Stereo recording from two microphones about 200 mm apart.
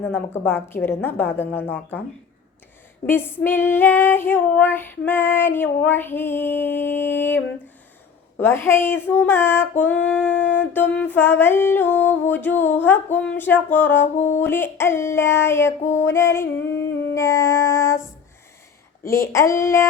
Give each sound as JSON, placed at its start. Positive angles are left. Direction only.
{"t": 0.0, "sound": "female singing", "side_deg": 10}
{"t": 3.1, "sound": "female singing", "side_deg": 10}
{"t": 16.6, "sound": "humming", "side_deg": 65}
{"t": 17.2, "sound": "female singing", "side_deg": 15}
{"t": 19.0, "sound": "female singing", "side_deg": 15}